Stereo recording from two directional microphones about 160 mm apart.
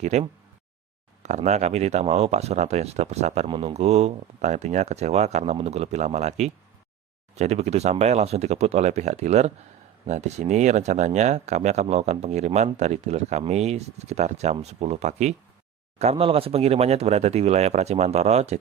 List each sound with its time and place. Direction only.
0.0 s speech: 45° right (ahead or behind)